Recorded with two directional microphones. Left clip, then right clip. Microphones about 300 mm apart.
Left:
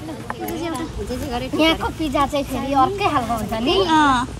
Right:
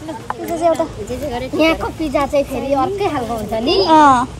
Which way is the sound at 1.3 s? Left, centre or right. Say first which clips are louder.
Right 3 dB; left.